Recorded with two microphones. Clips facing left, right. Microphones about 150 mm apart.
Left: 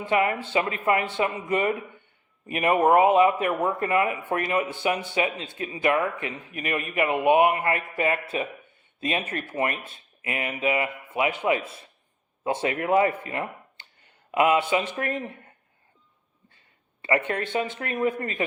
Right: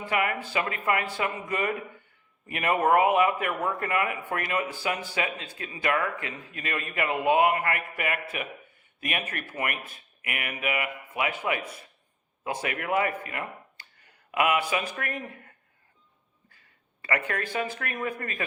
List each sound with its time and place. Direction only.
0.0 s speech: 25° left (ahead or behind)